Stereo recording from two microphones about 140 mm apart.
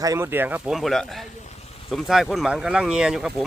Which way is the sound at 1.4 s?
50° left (ahead or behind).